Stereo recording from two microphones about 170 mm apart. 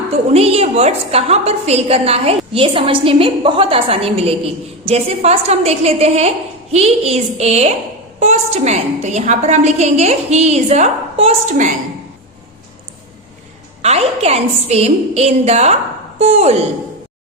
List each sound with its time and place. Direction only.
0.3 s a woman's voice: 35° right (ahead or behind)
13.8 s a woman's voice: 40° right (ahead or behind)